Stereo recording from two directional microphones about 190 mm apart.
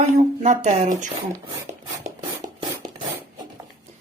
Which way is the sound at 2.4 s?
20° right (ahead or behind).